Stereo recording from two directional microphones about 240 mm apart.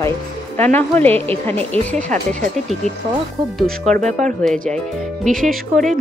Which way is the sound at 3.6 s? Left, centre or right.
Right.